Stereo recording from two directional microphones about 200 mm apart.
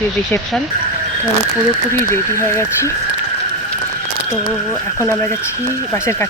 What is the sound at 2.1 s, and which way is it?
Speech, 15° left (ahead or behind).